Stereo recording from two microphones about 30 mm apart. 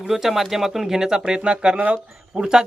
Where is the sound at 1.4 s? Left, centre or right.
Right.